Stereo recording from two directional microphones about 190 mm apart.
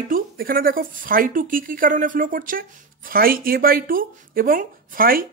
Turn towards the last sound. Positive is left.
turn(degrees=-50)  # may be behind; listen again after turning